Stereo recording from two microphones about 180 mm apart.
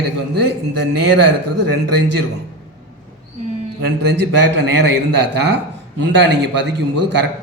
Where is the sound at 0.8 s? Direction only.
70° right (ahead or behind).